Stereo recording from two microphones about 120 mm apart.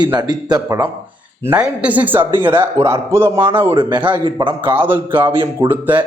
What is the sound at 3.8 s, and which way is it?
Speech, 40° right (ahead or behind).